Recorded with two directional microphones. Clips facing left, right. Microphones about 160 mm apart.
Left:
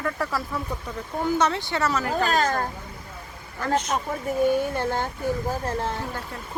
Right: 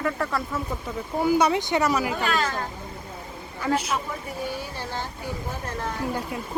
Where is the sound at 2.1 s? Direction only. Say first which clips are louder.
Left 3 dB; 40° left (ahead or behind).